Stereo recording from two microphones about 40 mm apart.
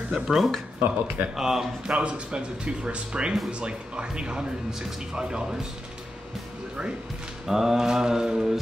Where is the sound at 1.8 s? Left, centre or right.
Right.